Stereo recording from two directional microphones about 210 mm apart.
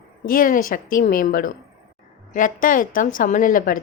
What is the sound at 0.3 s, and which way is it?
A woman's voice, 40° left (ahead or behind).